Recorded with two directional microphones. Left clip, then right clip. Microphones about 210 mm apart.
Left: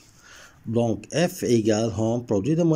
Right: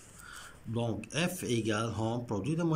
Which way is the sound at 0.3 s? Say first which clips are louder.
Left 12 dB; 20° left (ahead or behind).